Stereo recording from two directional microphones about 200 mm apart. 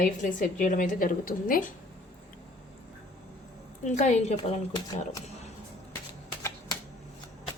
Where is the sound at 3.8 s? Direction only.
35° left (ahead or behind).